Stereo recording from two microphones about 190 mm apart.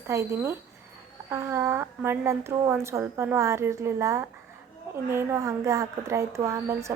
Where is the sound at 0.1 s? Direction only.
15° right (ahead or behind).